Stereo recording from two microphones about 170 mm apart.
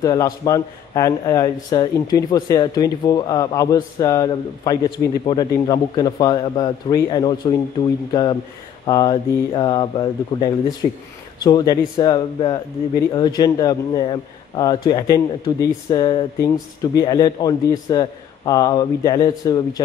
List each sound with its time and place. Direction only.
0.0 s a man's voice: 20° left (ahead or behind)